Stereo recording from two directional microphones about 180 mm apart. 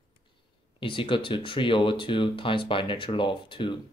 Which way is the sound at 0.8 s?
30° left (ahead or behind).